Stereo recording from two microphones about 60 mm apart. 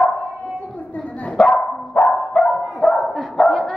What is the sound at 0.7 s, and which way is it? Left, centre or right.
Dog, left.